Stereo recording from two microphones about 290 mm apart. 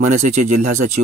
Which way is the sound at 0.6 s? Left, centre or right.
Right.